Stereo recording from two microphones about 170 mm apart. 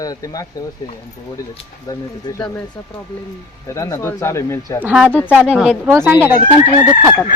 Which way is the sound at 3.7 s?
20° left (ahead or behind).